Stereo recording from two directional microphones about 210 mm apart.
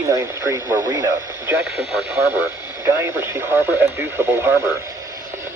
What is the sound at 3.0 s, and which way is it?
Speech, 15° right (ahead or behind).